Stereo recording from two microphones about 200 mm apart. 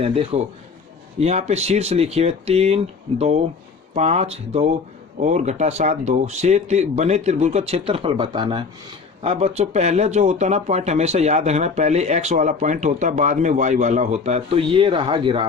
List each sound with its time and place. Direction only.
0.0 s a man's voice: 25° right (ahead or behind)